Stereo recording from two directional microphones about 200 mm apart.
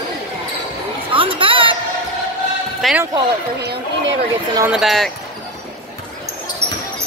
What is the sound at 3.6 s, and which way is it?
Chatter, 55° right (ahead or behind).